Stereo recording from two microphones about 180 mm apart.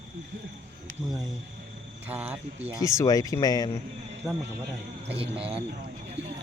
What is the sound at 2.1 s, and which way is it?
Speech, 10° right (ahead or behind).